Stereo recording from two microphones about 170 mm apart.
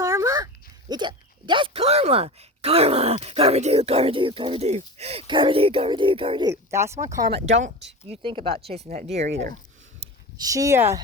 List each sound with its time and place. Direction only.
0.0 s speech: 20° right (ahead or behind)
7.6 s speech: 40° right (ahead or behind)
10.4 s speech: 20° right (ahead or behind)